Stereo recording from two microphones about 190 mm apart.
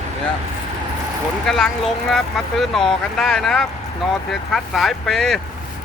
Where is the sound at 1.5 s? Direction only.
Centre (ahead or behind).